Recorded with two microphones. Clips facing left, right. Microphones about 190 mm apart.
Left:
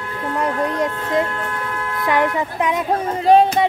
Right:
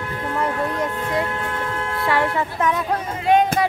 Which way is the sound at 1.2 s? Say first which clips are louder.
Left 1 dB; 25° right (ahead or behind).